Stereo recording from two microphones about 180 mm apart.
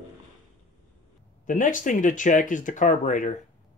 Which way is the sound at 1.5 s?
45° left (ahead or behind).